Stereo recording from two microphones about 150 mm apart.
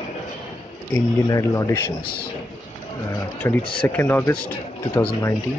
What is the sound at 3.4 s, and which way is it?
Speech, 15° left (ahead or behind).